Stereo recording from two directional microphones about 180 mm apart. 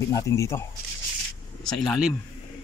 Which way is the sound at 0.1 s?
15° left (ahead or behind).